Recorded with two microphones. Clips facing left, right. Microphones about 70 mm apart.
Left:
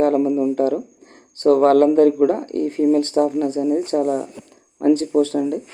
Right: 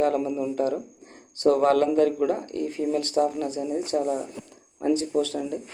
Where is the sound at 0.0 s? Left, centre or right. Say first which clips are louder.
Left 7 dB; left.